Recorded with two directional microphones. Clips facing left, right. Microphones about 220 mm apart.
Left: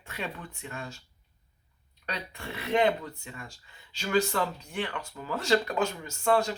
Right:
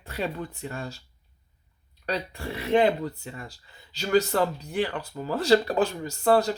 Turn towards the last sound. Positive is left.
turn(degrees=-35)  # may be behind; listen again after turning